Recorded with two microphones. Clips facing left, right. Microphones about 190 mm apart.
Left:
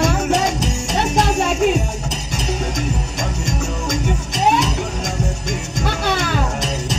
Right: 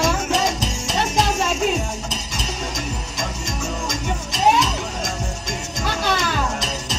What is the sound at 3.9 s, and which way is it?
Music, 60° left (ahead or behind).